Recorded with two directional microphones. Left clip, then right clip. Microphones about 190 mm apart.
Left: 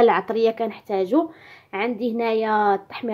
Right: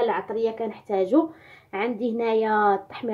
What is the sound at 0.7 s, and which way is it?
A woman's voice, 15° left (ahead or behind).